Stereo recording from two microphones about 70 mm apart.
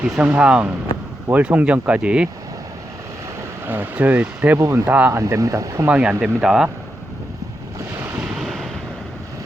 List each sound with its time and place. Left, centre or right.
0.0 s speech: centre
3.7 s speech: right
5.1 s speech: right
5.9 s speech: centre
8.4 s wind noise: centre